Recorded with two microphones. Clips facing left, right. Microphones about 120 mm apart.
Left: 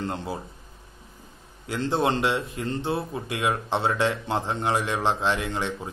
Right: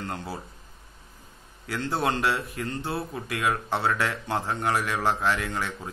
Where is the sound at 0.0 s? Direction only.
25° left (ahead or behind).